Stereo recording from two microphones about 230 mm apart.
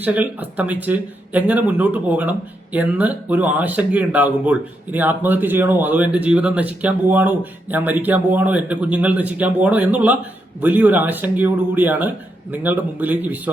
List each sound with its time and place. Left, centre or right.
0.0 s speech: centre